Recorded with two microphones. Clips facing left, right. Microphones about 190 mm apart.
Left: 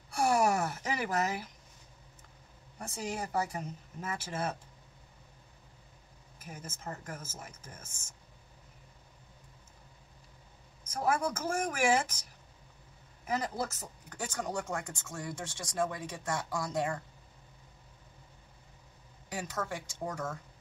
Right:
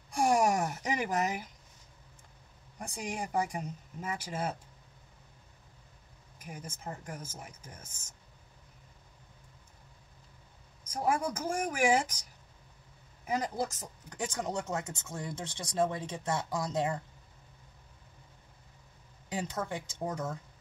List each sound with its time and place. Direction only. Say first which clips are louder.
0.1 s a sound: right 1 dB; 15° right (ahead or behind)
2.8 s speech: even; 15° right (ahead or behind)
6.4 s speech: right 1 dB; 10° right (ahead or behind)
10.9 s speech: even; 10° right (ahead or behind)
13.3 s speech: right 1 dB; 15° right (ahead or behind)
19.2 s speech: right 2 dB; 20° right (ahead or behind)